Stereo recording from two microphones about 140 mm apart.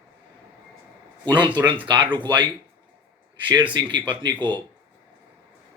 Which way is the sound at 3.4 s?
35° right (ahead or behind).